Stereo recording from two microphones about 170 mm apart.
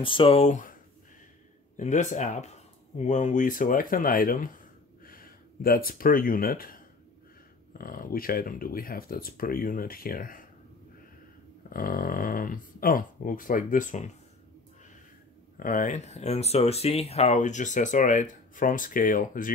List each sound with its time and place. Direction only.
0.0 s speech: 30° left (ahead or behind); by 0.7 s 45° left (ahead or behind)
1.8 s speech: 45° left (ahead or behind)
11.7 s speech: 55° left (ahead or behind)
15.6 s speech: 50° left (ahead or behind)